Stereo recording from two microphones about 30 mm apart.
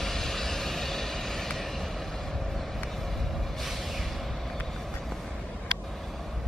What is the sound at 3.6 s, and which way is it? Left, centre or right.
Music, centre.